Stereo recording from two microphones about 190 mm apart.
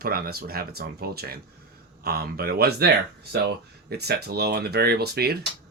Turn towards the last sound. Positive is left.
turn(degrees=-55)  # may be behind; listen again after turning